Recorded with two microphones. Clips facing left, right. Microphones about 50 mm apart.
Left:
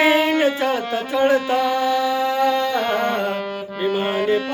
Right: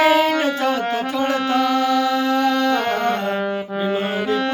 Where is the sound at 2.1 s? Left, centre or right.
Right.